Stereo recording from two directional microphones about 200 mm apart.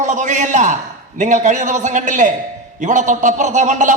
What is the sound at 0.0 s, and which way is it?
A man's voice, 40° right (ahead or behind).